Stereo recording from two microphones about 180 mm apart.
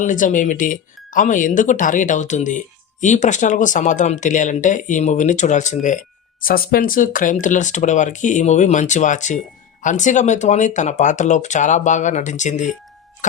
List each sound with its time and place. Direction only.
0.0 s speech: 45° left (ahead or behind)